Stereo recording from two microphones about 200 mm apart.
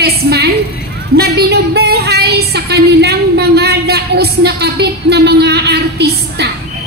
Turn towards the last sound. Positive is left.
turn(degrees=-55)  # may be behind; listen again after turning